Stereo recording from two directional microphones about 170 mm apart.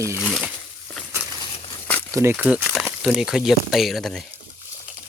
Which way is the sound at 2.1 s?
15° right (ahead or behind).